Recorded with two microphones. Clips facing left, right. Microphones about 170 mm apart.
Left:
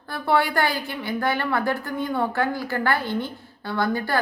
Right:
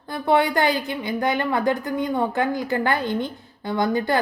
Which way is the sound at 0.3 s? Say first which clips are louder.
Right 3 dB; 20° right (ahead or behind).